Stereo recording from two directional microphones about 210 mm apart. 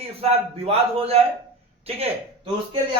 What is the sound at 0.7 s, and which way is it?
Speech, 30° right (ahead or behind).